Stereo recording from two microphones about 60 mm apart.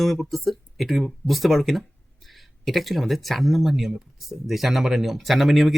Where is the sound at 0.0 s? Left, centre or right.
Centre.